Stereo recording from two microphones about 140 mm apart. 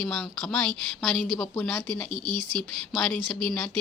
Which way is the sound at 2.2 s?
35° right (ahead or behind).